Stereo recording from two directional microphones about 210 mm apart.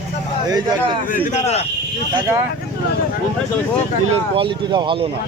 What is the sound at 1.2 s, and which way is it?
Speech, 30° left (ahead or behind).